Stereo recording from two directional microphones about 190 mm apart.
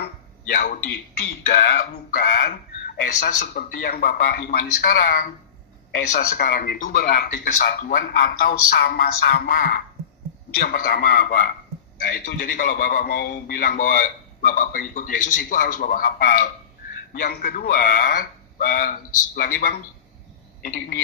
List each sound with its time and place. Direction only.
0.5 s a man's voice: 45° left (ahead or behind)